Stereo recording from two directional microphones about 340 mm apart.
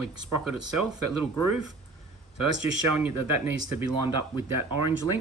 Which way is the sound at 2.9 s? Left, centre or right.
Centre.